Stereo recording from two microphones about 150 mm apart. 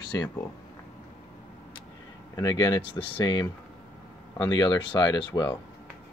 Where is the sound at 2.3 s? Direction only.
25° left (ahead or behind).